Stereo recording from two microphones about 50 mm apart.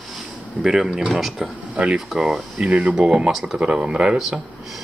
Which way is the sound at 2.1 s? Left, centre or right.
Centre.